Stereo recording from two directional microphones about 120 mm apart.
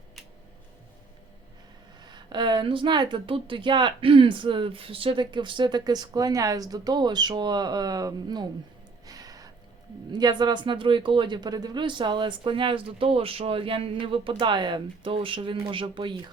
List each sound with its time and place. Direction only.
2.0 s speech: 40° right (ahead or behind)
9.0 s gasp: 30° right (ahead or behind)
10.1 s speech: 35° right (ahead or behind)